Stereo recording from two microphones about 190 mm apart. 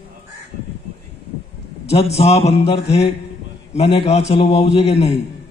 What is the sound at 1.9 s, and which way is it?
A man's voice, 35° left (ahead or behind).